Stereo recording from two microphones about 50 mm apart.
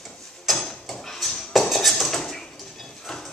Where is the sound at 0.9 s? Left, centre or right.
Centre.